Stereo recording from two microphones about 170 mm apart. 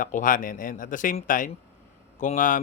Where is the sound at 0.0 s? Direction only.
50° left (ahead or behind).